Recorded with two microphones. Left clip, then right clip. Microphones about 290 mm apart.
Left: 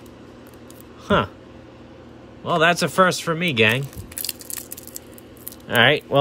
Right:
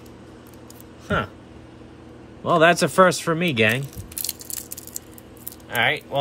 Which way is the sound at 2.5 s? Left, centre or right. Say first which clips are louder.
Right 2 dB; centre.